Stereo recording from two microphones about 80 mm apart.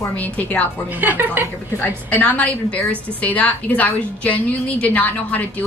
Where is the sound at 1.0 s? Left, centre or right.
Right.